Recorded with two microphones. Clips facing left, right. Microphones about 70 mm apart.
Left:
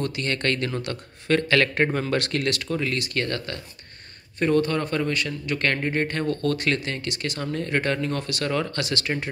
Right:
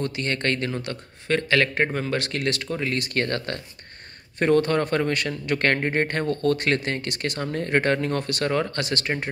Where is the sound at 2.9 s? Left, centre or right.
Right.